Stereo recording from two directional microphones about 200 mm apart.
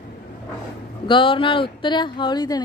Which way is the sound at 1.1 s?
25° left (ahead or behind).